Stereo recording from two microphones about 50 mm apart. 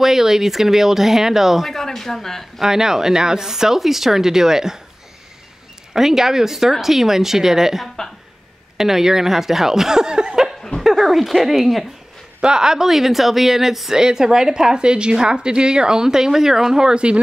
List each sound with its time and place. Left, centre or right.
0.0 s speech: centre
1.7 s speech: centre
2.6 s speech: centre
5.9 s speech: centre
12.4 s speech: centre